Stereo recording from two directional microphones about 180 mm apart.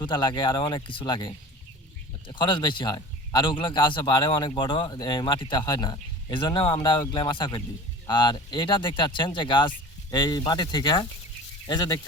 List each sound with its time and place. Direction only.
0.0 s a man's voice: 25° left (ahead or behind)